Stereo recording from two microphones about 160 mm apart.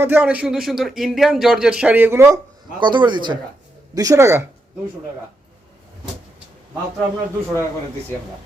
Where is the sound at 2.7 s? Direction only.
30° right (ahead or behind).